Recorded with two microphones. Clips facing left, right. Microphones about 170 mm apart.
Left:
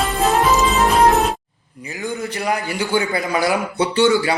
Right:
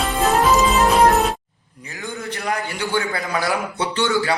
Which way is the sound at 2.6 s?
10° left (ahead or behind).